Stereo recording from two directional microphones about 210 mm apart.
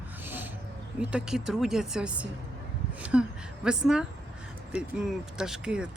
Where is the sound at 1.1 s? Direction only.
5° right (ahead or behind).